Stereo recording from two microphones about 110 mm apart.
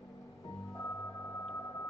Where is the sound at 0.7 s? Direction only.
25° left (ahead or behind).